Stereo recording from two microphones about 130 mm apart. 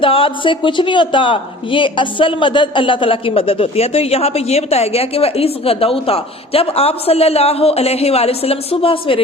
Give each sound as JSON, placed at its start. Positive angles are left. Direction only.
{"t": 0.0, "sound": "a woman's voice", "side_deg": 45}